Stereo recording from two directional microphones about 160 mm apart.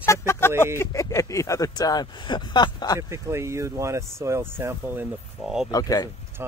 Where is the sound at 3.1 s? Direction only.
15° right (ahead or behind).